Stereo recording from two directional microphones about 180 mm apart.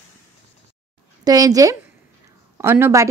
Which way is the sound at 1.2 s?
20° right (ahead or behind).